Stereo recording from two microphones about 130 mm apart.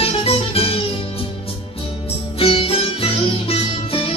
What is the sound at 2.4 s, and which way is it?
Music, 45° left (ahead or behind).